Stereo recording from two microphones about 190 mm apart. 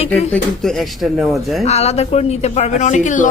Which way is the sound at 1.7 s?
35° left (ahead or behind).